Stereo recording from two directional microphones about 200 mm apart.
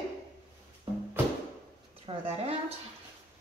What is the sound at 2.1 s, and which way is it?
Speech, 25° right (ahead or behind).